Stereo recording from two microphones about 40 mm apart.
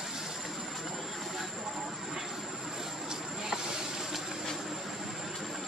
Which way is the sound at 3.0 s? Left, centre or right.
Centre.